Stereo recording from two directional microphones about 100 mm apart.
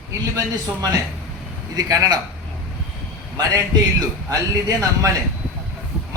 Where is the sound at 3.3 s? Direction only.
40° right (ahead or behind).